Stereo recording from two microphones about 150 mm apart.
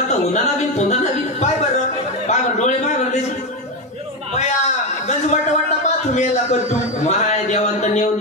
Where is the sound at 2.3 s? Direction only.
50° left (ahead or behind).